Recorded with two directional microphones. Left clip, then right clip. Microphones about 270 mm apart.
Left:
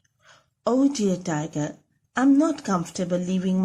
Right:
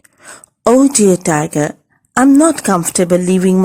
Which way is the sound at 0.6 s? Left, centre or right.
Right.